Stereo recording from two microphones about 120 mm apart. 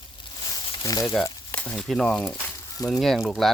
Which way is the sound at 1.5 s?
10° left (ahead or behind).